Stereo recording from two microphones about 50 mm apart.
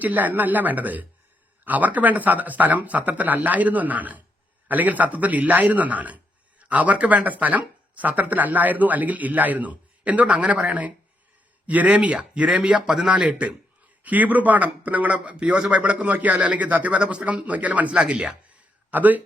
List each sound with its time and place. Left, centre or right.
0.0 s speech: right
14.0 s speech: right
18.0 s speech: centre
18.9 s speech: right